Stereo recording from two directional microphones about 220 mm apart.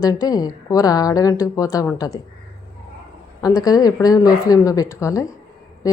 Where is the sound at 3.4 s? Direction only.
15° left (ahead or behind).